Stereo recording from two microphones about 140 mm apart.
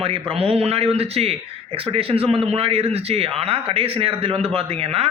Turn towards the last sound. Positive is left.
turn(degrees=-45)  # may be behind; listen again after turning